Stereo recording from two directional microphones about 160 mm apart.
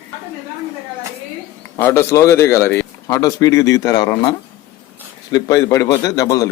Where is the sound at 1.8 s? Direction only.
15° left (ahead or behind).